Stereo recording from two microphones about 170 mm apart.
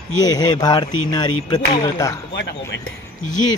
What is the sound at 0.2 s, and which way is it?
Speech, 20° left (ahead or behind).